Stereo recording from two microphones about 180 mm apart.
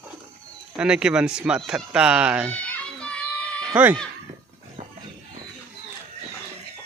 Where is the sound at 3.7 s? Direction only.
10° right (ahead or behind).